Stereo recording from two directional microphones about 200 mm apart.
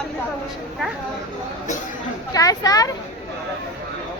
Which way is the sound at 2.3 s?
20° left (ahead or behind).